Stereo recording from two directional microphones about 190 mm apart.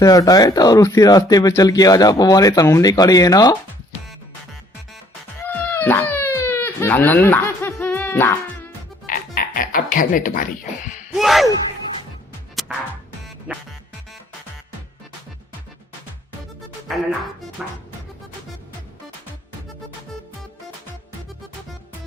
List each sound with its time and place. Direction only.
0.0 s speech: 20° left (ahead or behind)
5.4 s baby cry: 10° left (ahead or behind)
9.0 s music: 45° left (ahead or behind)
11.1 s a sound: centre (ahead or behind)
13.5 s music: 5° right (ahead or behind)
16.9 s music: centre (ahead or behind)